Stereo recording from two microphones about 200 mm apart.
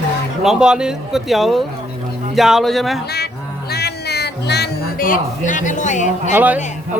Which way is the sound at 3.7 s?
55° left (ahead or behind).